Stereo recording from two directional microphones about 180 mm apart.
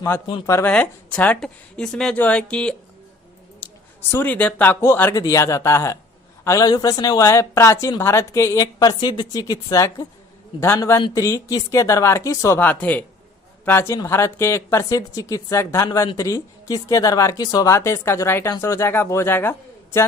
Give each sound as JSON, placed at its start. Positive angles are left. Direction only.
{"t": 0.4, "sound": "a woman's voice", "side_deg": 10}
{"t": 3.6, "sound": "a sound", "side_deg": 10}
{"t": 4.1, "sound": "speech", "side_deg": 10}